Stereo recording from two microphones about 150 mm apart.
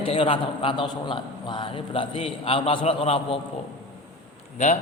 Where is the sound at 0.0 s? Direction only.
35° left (ahead or behind).